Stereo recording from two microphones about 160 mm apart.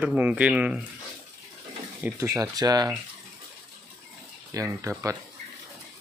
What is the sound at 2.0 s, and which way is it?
Speech, 20° right (ahead or behind).